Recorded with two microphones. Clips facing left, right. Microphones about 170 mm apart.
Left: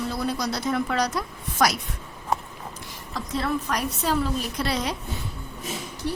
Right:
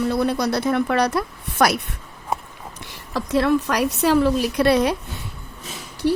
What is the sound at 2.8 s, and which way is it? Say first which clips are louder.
A woman's voice: right 9 dB; 70° right (ahead or behind).